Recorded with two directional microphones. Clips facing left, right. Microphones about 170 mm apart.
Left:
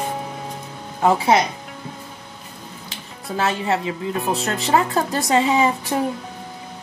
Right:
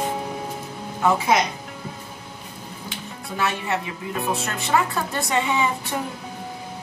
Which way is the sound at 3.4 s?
30° left (ahead or behind).